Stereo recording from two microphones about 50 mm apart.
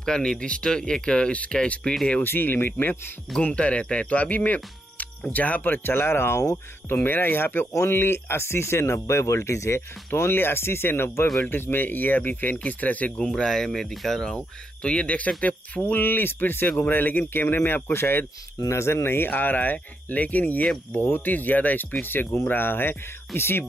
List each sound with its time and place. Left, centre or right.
0.0 s speech: centre
2.2 s speech: left
3.4 s speech: left
5.9 s speech: left
6.9 s speech: left
13.4 s speech: centre; by 18.2 s left
18.7 s speech: left